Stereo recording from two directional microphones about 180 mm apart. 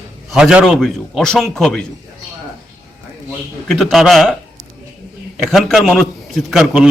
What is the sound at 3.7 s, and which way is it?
Speech, centre (ahead or behind).